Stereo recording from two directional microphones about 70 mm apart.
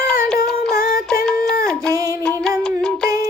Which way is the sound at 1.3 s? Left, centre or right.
Centre.